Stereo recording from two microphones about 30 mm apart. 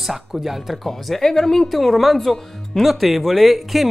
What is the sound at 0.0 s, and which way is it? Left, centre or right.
Speech, centre.